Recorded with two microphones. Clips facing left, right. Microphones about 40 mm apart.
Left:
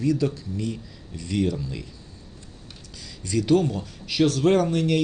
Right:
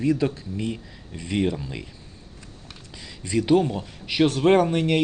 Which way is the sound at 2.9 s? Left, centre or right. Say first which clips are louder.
Right 1 dB; right.